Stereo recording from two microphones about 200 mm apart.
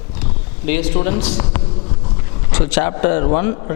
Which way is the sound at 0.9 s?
30° left (ahead or behind).